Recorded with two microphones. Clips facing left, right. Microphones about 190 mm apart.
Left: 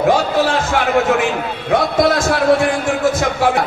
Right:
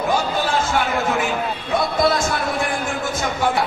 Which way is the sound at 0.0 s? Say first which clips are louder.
Left 6 dB; 80° left.